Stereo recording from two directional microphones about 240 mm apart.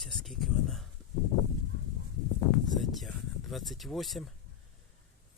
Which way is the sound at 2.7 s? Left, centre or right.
Centre.